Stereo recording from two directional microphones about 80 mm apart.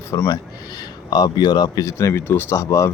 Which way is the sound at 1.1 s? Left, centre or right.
Left.